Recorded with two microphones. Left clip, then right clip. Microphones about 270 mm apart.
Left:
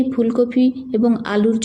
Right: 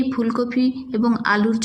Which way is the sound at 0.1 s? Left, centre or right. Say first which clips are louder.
Left 5 dB; centre.